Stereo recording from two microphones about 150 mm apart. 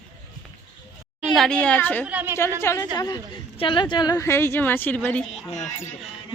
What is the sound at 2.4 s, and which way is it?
A woman's voice, 20° left (ahead or behind).